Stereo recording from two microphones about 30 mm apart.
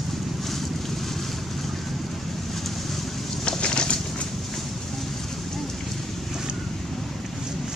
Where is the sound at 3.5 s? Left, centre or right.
Left.